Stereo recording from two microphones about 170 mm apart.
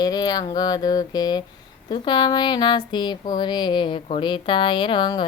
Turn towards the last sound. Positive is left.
turn(degrees=25)  # may be behind; listen again after turning